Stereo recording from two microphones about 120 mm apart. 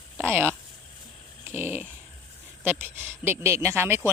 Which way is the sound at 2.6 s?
15° right (ahead or behind).